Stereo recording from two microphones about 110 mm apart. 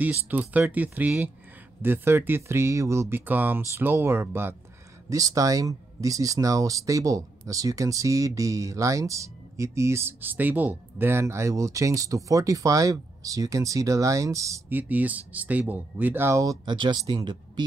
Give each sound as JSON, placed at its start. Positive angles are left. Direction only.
{"t": 0.0, "sound": "speech", "side_deg": -15}
{"t": 5.1, "sound": "speech", "side_deg": -30}
{"t": 14.7, "sound": "speech", "side_deg": -15}
{"t": 16.6, "sound": "speech", "side_deg": -45}